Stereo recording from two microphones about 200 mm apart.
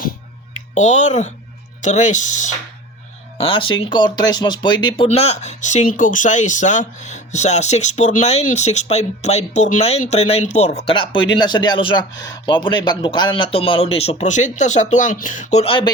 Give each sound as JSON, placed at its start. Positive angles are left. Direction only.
{"t": 0.7, "sound": "speech", "side_deg": 35}
{"t": 3.3, "sound": "speech", "side_deg": 25}